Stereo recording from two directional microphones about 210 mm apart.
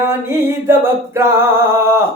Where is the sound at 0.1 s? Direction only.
10° right (ahead or behind).